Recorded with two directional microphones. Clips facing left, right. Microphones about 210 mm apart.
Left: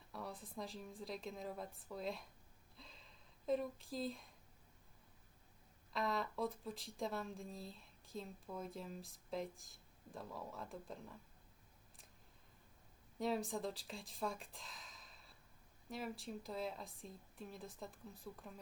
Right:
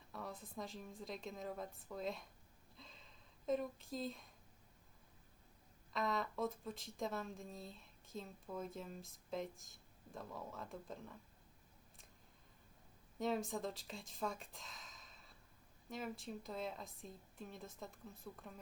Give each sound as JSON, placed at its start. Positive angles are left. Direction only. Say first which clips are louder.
{"t": 0.1, "sound": "speech", "louder": "even", "side_deg": 0}
{"t": 2.7, "sound": "a sound", "louder": "even", "side_deg": 0}
{"t": 5.9, "sound": "speech", "louder": "even", "side_deg": 0}
{"t": 13.1, "sound": "speech", "louder": "even", "side_deg": 0}